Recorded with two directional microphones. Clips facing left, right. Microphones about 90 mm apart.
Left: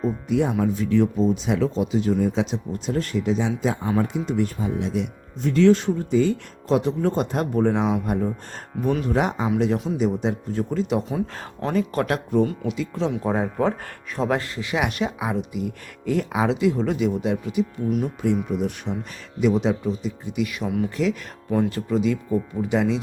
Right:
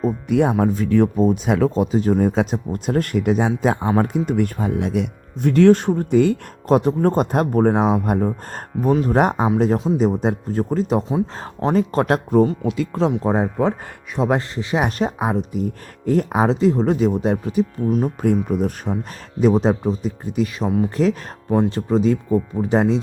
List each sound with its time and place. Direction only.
0.3 s speech: 55° right (ahead or behind)
8.9 s speech: 35° right (ahead or behind)
9.1 s speech: 45° right (ahead or behind)
11.1 s speech: 30° right (ahead or behind)
12.7 s speech: 50° right (ahead or behind)
13.1 s speech: 25° right (ahead or behind)